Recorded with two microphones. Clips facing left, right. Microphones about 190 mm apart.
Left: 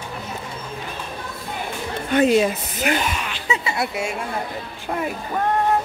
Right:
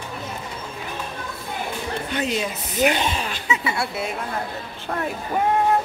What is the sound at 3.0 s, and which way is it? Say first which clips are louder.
Speech: right 1 dB; 30° right (ahead or behind).